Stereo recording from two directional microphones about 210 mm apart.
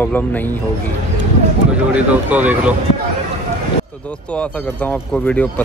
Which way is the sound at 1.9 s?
5° right (ahead or behind).